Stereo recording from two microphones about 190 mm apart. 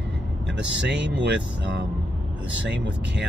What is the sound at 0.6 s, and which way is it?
Speech, 65° right (ahead or behind).